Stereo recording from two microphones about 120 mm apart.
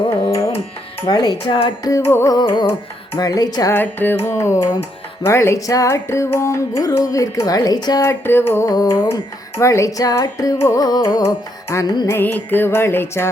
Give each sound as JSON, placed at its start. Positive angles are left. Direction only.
{"t": 0.2, "sound": "tabla", "side_deg": 30}
{"t": 1.0, "sound": "speech", "side_deg": 35}
{"t": 1.8, "sound": "music", "side_deg": 25}
{"t": 2.4, "sound": "speech", "side_deg": 40}
{"t": 3.7, "sound": "music", "side_deg": 15}
{"t": 8.2, "sound": "music", "side_deg": 20}
{"t": 8.7, "sound": "music", "side_deg": 30}
{"t": 12.0, "sound": "music", "side_deg": 15}